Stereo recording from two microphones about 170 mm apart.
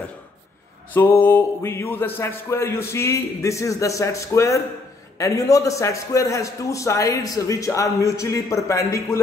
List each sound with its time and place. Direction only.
0.9 s a man's voice: 10° left (ahead or behind)